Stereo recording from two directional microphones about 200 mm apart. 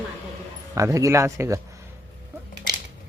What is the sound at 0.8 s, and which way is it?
Speech, 15° right (ahead or behind).